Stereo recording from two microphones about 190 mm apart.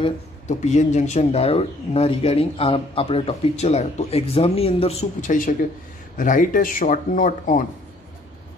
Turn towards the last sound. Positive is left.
turn(degrees=45)  # may be behind; listen again after turning